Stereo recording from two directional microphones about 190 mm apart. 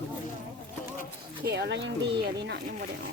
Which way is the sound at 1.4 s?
60° right (ahead or behind).